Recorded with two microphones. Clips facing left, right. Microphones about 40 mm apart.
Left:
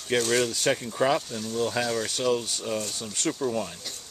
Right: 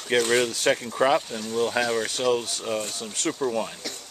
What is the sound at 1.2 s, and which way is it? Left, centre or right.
Speech, right.